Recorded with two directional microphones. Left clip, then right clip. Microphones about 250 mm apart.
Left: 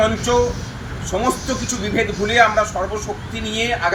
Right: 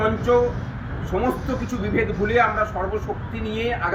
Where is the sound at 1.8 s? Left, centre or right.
Centre.